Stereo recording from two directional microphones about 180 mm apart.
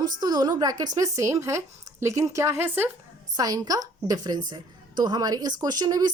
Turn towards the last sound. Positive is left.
turn(degrees=-20)  # may be behind; listen again after turning